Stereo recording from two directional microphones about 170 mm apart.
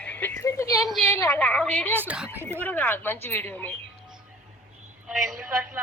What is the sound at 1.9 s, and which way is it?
Speech, 10° right (ahead or behind).